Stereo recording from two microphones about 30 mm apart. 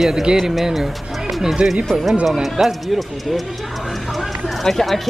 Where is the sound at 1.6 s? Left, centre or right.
Right.